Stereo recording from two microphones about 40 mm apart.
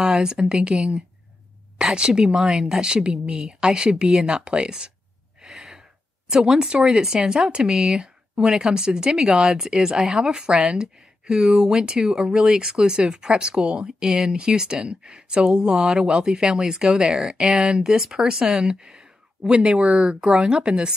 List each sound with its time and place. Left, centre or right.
0.0 s speech: centre
2.0 s speech: centre
3.1 s speech: centre
4.4 s speech: right
5.5 s gasp: centre
6.3 s speech: centre
9.6 s speech: right
9.9 s speech: centre
10.3 s speech: centre
17.6 s speech: right